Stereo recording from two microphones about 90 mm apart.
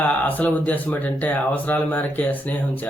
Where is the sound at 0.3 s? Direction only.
20° left (ahead or behind).